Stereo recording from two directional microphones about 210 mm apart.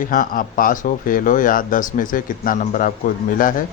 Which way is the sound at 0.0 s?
40° left (ahead or behind).